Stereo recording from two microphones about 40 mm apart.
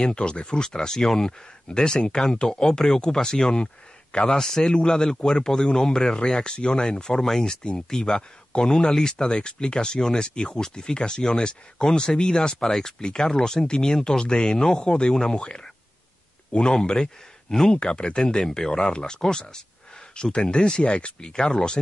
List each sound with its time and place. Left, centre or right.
0.0 s speech: left
4.3 s speech: centre
12.6 s speech: centre
13.0 s speech: left
17.7 s speech: left